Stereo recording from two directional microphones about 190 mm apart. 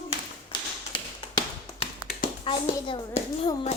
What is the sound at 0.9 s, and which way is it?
Tap, 25° left (ahead or behind).